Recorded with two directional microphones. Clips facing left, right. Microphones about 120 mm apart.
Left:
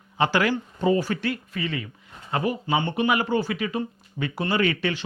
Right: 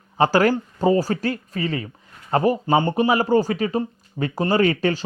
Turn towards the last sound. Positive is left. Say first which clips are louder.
# right 5 dB
turn(degrees=-40)  # may be behind; listen again after turning